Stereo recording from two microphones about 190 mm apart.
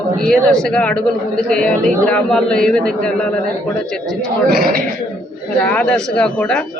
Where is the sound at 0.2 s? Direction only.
5° left (ahead or behind).